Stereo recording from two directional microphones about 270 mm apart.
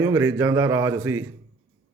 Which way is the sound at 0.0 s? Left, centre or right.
Centre.